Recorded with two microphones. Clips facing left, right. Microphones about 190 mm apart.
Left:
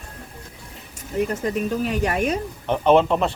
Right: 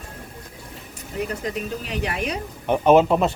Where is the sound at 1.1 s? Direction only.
45° left (ahead or behind).